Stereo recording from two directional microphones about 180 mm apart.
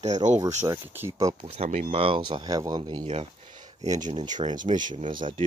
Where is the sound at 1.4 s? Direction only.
35° right (ahead or behind).